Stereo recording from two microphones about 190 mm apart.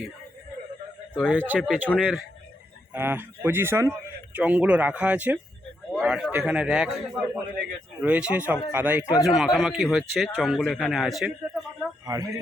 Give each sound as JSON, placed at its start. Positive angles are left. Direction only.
{"t": 1.1, "sound": "speech", "side_deg": -5}
{"t": 8.0, "sound": "a man's voice", "side_deg": -5}
{"t": 12.0, "sound": "speech", "side_deg": -20}